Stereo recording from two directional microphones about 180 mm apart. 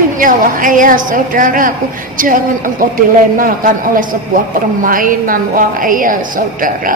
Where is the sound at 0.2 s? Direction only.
50° right (ahead or behind).